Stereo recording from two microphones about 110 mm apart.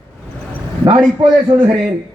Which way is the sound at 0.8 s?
45° right (ahead or behind).